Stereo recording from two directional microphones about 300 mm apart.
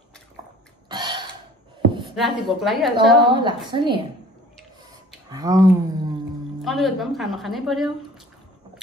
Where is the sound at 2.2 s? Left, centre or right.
Centre.